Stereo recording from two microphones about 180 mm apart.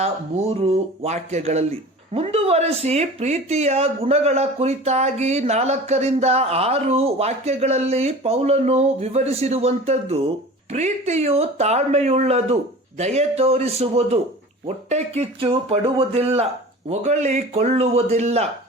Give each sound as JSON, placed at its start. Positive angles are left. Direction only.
{"t": 0.0, "sound": "speech", "side_deg": -35}